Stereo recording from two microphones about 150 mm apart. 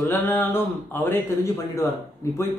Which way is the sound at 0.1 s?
10° left (ahead or behind).